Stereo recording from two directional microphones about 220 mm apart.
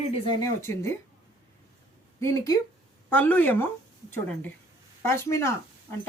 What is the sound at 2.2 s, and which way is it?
Speech, 15° left (ahead or behind).